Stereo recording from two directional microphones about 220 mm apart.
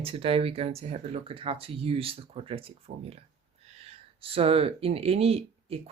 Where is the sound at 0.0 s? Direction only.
25° right (ahead or behind).